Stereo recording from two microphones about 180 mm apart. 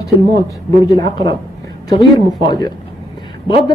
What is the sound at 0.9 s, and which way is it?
A woman's voice, 25° left (ahead or behind).